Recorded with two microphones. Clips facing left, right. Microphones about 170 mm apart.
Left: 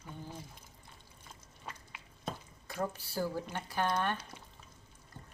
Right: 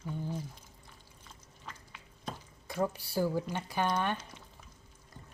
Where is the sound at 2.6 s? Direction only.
10° right (ahead or behind).